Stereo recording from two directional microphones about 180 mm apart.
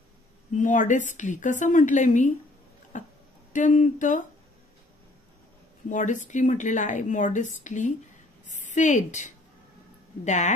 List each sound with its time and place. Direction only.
0.6 s a woman's voice: 45° left (ahead or behind)
5.9 s a woman's voice: 45° left (ahead or behind)